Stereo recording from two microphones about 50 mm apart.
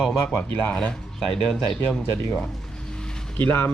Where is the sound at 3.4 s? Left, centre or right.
Left.